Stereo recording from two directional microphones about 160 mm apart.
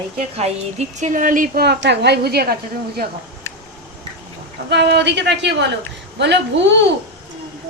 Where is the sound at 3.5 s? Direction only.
15° left (ahead or behind).